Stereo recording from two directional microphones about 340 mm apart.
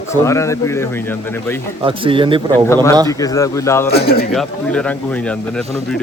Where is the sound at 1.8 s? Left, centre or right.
Centre.